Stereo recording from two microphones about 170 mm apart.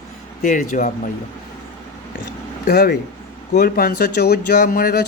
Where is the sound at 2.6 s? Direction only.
65° left (ahead or behind).